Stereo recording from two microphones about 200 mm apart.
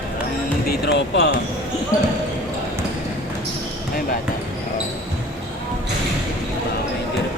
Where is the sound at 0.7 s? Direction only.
55° left (ahead or behind).